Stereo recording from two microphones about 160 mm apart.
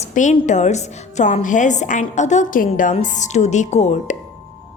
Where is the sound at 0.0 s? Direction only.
50° left (ahead or behind).